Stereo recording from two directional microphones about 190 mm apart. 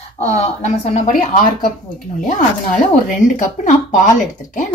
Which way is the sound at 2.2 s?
40° left (ahead or behind).